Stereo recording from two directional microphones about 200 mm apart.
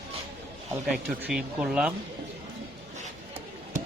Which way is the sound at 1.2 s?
5° right (ahead or behind).